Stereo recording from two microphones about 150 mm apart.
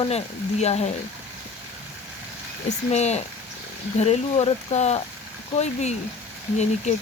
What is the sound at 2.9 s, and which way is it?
Speech, 50° left (ahead or behind).